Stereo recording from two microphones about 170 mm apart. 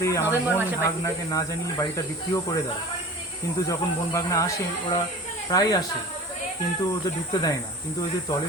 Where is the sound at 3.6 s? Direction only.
20° left (ahead or behind).